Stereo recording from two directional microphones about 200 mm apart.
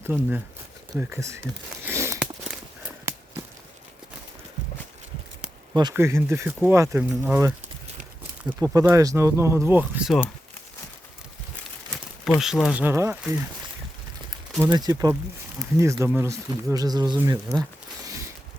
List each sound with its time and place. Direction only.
0.0 s speech: 5° right (ahead or behind)
1.8 s a sound: 10° right (ahead or behind)
5.7 s speech: 15° right (ahead or behind)
12.2 s speech: centre (ahead or behind)
14.6 s speech: 20° right (ahead or behind)